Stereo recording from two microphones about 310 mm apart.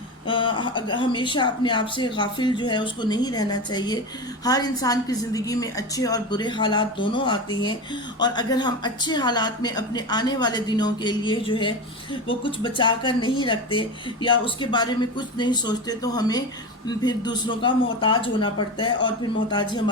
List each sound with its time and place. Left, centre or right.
0.3 s speech: centre